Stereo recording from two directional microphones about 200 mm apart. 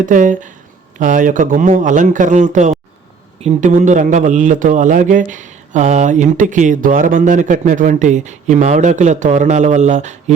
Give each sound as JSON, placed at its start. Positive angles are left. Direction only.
{"t": 0.0, "sound": "a man's voice", "side_deg": -40}